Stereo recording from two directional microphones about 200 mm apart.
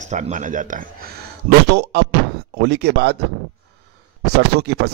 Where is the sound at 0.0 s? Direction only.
35° right (ahead or behind); by 3.2 s 55° right (ahead or behind).